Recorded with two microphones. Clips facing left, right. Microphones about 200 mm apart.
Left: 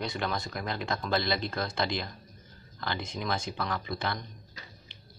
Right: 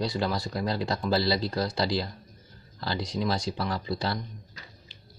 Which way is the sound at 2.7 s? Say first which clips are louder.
Right 4 dB; 30° right (ahead or behind).